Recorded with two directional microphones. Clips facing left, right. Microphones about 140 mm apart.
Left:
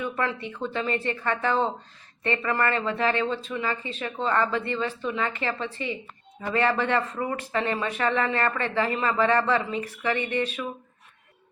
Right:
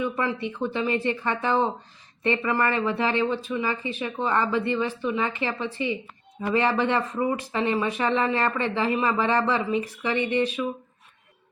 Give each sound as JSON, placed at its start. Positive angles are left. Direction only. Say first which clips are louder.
{"t": 0.0, "sound": "speech", "louder": "right 2 dB", "side_deg": -15}